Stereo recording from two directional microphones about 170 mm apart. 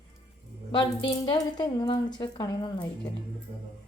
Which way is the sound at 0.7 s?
30° left (ahead or behind).